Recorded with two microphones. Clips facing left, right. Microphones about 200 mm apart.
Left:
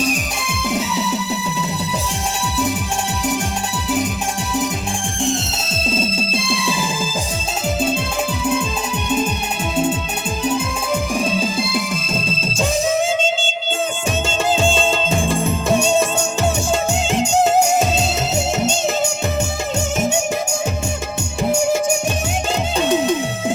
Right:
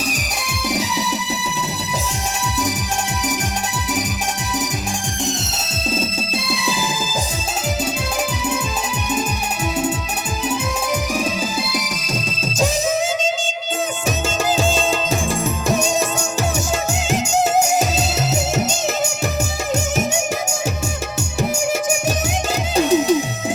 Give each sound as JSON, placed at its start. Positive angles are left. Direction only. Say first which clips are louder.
{"t": 11.3, "sound": "music", "louder": "left 3 dB", "side_deg": 25}
{"t": 14.3, "sound": "music", "louder": "left 1 dB", "side_deg": 30}
{"t": 22.7, "sound": "music", "louder": "right 3 dB", "side_deg": -35}